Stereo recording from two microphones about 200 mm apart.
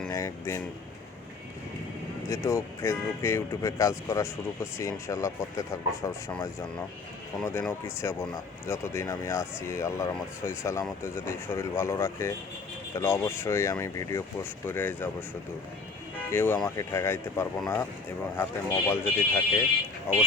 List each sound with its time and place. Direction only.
0.1 s speech: 15° left (ahead or behind)
2.3 s speech: 15° left (ahead or behind)
7.4 s speech: 10° left (ahead or behind)
16.3 s speech: 10° left (ahead or behind)